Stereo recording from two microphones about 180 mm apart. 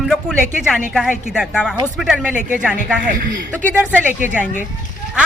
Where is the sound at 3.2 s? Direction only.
50° right (ahead or behind).